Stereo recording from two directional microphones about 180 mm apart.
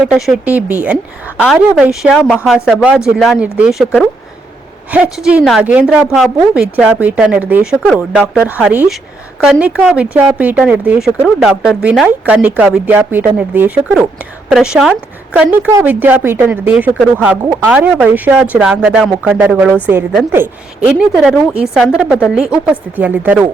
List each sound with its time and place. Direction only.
0.1 s a woman's voice: centre (ahead or behind)